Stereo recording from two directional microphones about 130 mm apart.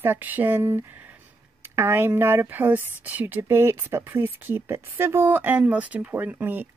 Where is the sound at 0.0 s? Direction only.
15° right (ahead or behind).